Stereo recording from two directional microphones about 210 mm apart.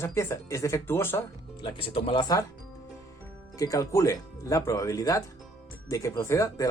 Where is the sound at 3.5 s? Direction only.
15° left (ahead or behind).